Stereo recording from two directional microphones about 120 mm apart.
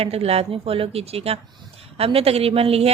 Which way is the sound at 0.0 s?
55° right (ahead or behind).